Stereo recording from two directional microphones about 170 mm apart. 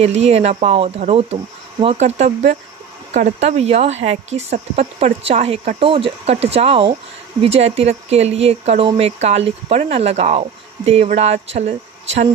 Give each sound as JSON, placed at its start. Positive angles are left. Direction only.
{"t": 0.0, "sound": "speech", "side_deg": -40}